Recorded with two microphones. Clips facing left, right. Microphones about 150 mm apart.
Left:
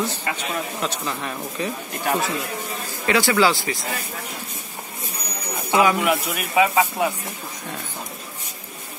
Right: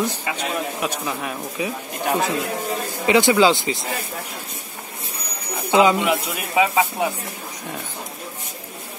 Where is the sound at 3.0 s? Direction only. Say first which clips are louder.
Right 3 dB; 20° right (ahead or behind).